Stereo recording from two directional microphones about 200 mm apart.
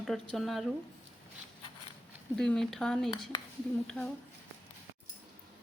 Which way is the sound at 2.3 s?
5° left (ahead or behind).